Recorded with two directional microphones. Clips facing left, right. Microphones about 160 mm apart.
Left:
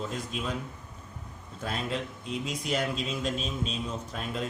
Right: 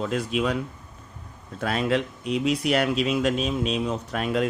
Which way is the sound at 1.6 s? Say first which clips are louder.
Right 9 dB; 75° right (ahead or behind).